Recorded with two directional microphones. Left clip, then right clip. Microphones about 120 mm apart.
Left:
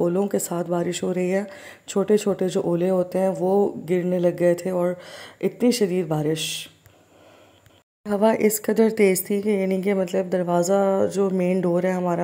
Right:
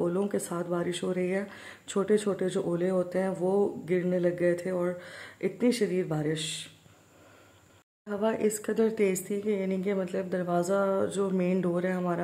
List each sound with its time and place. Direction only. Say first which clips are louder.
0.3 s speech: left 7 dB; 30° left (ahead or behind)
8.0 s speech: left 9 dB; 45° left (ahead or behind); by 12.0 s 30° left (ahead or behind)